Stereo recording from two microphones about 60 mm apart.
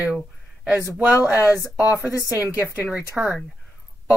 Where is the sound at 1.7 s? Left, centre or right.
Right.